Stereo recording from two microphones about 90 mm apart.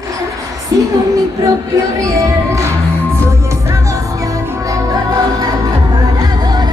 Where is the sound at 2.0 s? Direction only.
35° right (ahead or behind).